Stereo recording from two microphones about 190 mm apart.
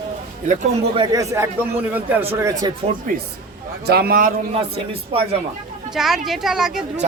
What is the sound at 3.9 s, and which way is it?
Speech, 55° right (ahead or behind).